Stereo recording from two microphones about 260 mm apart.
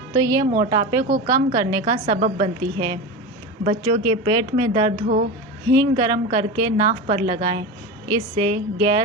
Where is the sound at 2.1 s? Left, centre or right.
Right; by 9.1 s centre.